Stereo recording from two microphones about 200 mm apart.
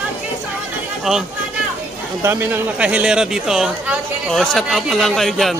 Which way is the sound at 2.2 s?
10° right (ahead or behind).